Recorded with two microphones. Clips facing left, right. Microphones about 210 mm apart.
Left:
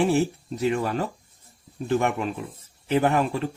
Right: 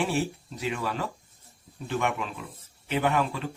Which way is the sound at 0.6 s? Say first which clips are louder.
Left 7 dB; 45° left (ahead or behind).